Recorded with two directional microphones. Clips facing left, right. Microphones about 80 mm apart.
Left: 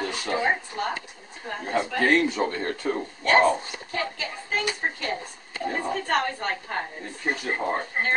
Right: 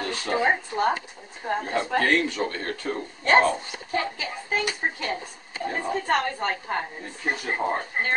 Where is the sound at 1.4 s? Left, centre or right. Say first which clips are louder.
Right 7 dB; right.